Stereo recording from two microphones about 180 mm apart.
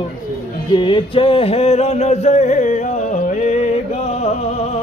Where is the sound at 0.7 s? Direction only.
30° left (ahead or behind); by 2.8 s 45° left (ahead or behind).